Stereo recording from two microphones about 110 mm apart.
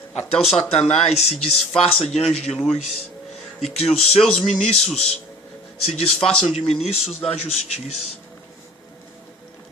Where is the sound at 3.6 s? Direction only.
70° left (ahead or behind).